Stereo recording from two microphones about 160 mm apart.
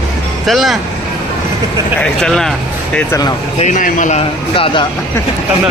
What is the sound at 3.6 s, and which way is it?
Speech, 55° left (ahead or behind).